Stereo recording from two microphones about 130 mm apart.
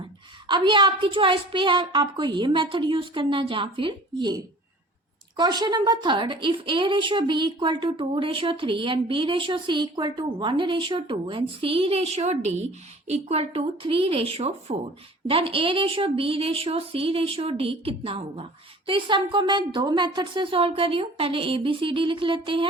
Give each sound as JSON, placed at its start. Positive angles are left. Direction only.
{"t": 0.4, "sound": "a woman's voice", "side_deg": -35}